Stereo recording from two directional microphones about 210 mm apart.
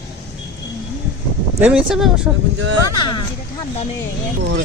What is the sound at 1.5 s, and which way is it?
Speech, 5° right (ahead or behind).